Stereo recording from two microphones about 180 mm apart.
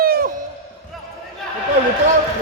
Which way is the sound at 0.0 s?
55° right (ahead or behind).